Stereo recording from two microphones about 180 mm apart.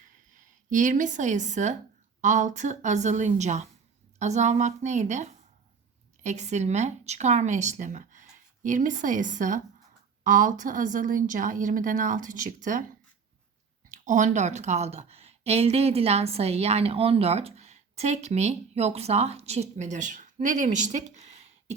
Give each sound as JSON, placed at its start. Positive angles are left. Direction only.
{"t": 0.3, "sound": "a woman's voice", "side_deg": -45}
{"t": 13.9, "sound": "a woman's voice", "side_deg": -45}